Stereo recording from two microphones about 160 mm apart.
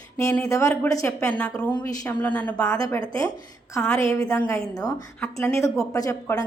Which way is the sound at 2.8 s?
25° left (ahead or behind).